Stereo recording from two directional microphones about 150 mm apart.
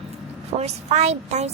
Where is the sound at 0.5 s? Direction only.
45° right (ahead or behind).